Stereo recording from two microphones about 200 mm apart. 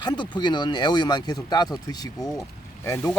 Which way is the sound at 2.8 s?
15° left (ahead or behind).